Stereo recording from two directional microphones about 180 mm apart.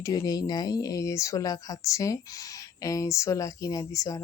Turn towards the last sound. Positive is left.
turn(degrees=20)  # may be behind; listen again after turning